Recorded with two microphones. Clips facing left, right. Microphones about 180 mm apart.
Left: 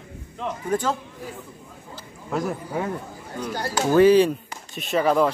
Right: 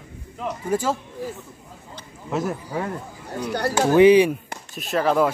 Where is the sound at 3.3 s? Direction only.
65° right (ahead or behind).